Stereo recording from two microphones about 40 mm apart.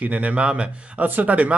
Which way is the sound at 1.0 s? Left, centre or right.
Right.